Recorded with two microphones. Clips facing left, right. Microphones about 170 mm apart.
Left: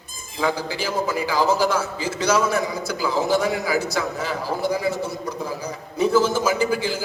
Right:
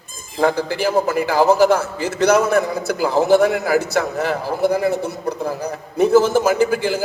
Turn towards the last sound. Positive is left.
turn(degrees=-55)  # may be behind; listen again after turning